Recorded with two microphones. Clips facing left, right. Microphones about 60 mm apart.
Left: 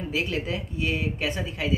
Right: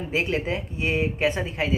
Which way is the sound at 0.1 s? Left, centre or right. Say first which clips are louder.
Right 4 dB; right.